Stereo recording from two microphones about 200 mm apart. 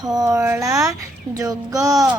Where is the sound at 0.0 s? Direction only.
20° right (ahead or behind).